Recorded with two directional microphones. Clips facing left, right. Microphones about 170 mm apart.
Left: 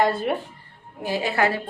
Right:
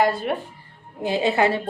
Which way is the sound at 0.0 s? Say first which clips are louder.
Even; centre (ahead or behind).